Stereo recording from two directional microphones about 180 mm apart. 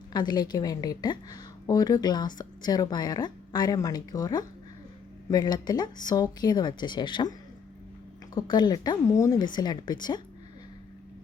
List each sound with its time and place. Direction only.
0.1 s a woman's voice: 25° left (ahead or behind)
8.4 s a woman's voice: 25° left (ahead or behind)